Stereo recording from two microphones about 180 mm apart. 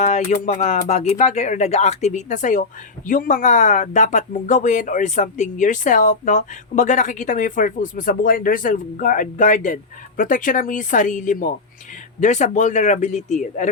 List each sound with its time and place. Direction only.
0.0 s speech: 40° left (ahead or behind)